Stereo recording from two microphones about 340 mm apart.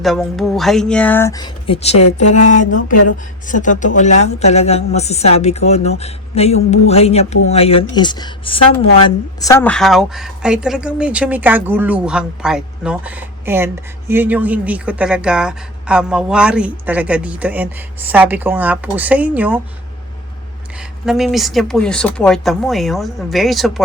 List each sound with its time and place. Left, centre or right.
0.0 s a woman's voice: centre
21.0 s a woman's voice: centre